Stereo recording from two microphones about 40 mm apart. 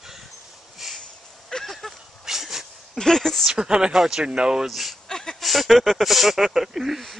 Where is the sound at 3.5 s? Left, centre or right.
Centre.